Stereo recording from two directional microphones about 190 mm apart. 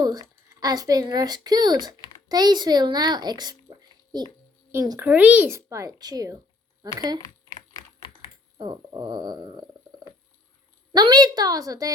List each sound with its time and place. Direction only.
0.0 s speech: 20° right (ahead or behind)
7.2 s typing: 20° left (ahead or behind)
8.5 s speech: 25° right (ahead or behind)